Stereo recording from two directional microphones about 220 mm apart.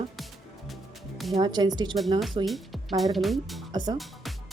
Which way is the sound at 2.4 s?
Centre (ahead or behind).